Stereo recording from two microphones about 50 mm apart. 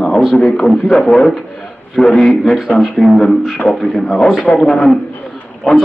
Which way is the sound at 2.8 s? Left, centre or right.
Centre.